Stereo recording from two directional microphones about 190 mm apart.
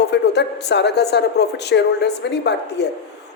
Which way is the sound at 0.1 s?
65° left (ahead or behind).